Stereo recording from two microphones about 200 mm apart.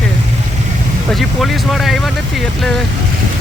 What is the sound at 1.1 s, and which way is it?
Speech, centre (ahead or behind).